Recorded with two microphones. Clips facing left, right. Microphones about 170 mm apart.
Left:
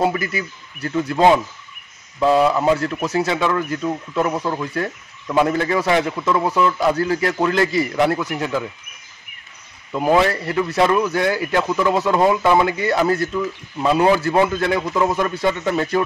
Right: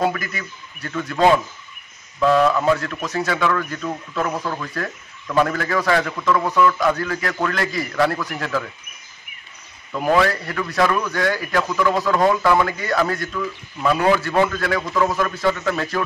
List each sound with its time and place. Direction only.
0.0 s speech: 25° left (ahead or behind)
2.8 s speech: 30° left (ahead or behind)
9.9 s speech: 20° left (ahead or behind)